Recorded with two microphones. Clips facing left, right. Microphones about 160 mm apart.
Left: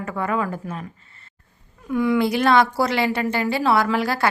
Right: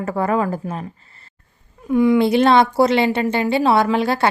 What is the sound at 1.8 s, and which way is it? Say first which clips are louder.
Speech: right 5 dB; 20° right (ahead or behind).